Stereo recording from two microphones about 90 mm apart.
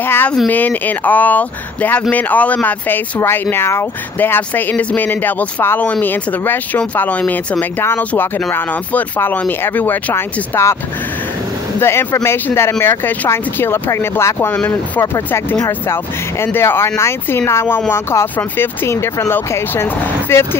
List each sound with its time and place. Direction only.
0.0 s a sound: 25° left (ahead or behind)
0.5 s speech: 20° left (ahead or behind)
3.2 s speech: 25° left (ahead or behind)
11.8 s speech: 25° left (ahead or behind)